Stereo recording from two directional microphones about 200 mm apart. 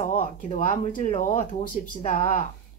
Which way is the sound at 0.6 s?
35° left (ahead or behind).